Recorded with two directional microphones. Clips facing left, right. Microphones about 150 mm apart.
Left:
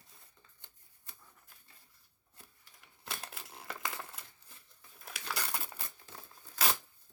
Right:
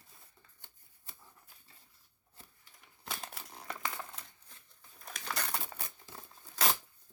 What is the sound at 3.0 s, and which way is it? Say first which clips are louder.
Crumpling: right 1 dB; centre (ahead or behind).